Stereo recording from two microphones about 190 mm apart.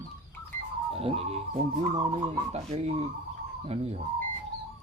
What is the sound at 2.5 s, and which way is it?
Speech, 35° right (ahead or behind).